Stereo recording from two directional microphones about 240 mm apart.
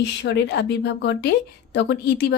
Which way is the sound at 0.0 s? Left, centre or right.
Left.